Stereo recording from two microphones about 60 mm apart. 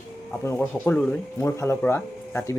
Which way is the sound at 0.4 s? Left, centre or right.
Left.